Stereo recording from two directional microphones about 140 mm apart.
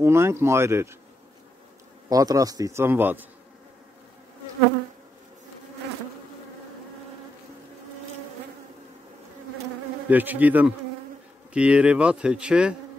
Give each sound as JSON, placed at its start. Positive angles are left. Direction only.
{"t": 0.0, "sound": "a man's voice", "side_deg": -20}
{"t": 2.0, "sound": "a man's voice", "side_deg": -25}
{"t": 10.0, "sound": "speech", "side_deg": -10}